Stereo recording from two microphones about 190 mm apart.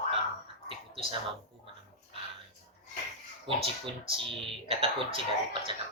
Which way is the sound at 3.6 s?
25° right (ahead or behind).